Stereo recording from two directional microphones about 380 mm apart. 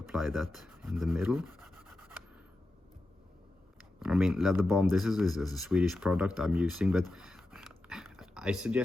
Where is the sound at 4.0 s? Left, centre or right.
Centre.